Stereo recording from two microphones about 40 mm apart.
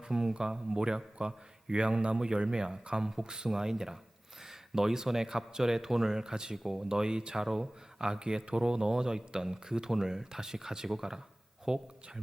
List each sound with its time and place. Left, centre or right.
0.1 s a man's voice: centre